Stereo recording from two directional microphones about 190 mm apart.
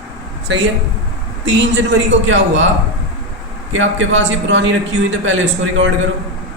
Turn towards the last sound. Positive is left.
turn(degrees=-80)